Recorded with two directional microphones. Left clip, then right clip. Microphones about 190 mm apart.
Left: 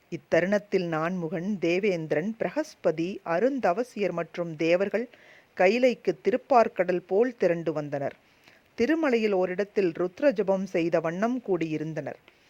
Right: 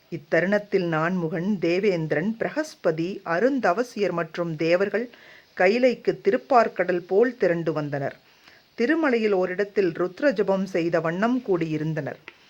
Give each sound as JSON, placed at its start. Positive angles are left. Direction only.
{"t": 0.1, "sound": "speech", "side_deg": 45}
{"t": 1.1, "sound": "speech", "side_deg": 30}
{"t": 1.5, "sound": "speech", "side_deg": 40}